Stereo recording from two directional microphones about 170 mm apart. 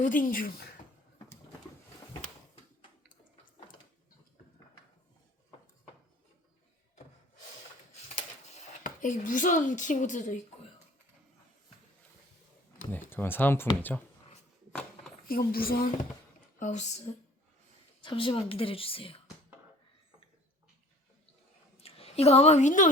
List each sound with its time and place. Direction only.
0.0 s speech: 50° left (ahead or behind)
8.4 s speech: 45° left (ahead or behind)
12.9 s speech: 10° left (ahead or behind)
15.3 s speech: 60° left (ahead or behind)
16.6 s speech: 45° left (ahead or behind)
18.0 s a woman's voice: 30° left (ahead or behind)
21.8 s a woman's voice: 35° left (ahead or behind)